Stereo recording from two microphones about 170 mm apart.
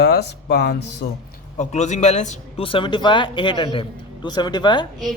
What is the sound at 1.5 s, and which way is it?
Speech, 40° left (ahead or behind).